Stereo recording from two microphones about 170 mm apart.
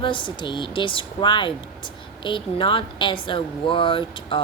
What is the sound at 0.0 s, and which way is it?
Speech, 30° left (ahead or behind).